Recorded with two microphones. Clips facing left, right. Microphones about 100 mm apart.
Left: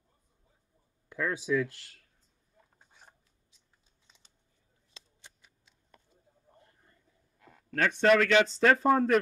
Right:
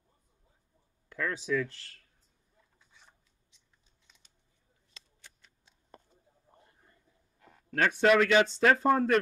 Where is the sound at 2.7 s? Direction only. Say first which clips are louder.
Left 3 dB; 50° left (ahead or behind).